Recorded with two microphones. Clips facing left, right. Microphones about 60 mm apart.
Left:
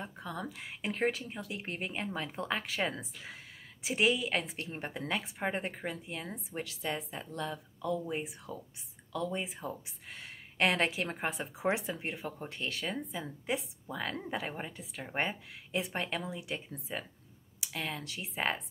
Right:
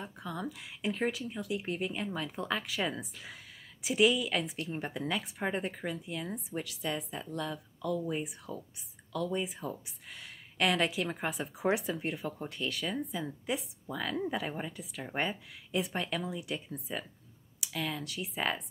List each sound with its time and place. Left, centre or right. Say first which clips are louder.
0.0 s speech: right 1 dB; left